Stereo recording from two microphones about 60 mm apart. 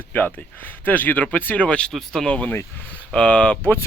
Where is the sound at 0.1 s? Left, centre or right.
Left.